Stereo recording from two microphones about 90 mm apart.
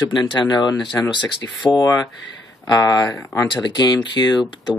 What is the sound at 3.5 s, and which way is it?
Speech, 55° left (ahead or behind).